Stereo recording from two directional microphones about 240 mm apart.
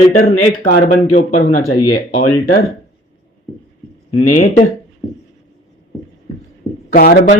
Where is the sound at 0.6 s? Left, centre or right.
Left.